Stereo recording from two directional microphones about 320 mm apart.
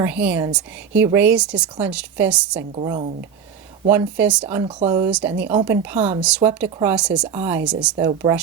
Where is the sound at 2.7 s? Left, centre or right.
Centre.